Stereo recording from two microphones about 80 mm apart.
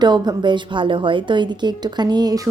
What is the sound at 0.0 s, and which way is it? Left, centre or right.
A woman's voice, right.